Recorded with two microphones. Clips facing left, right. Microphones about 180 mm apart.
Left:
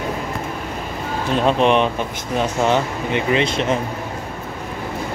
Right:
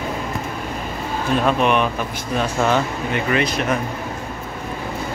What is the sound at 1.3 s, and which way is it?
Speech, 25° left (ahead or behind).